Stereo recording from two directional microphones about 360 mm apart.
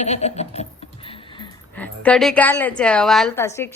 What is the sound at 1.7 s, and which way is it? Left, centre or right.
A woman's voice, centre.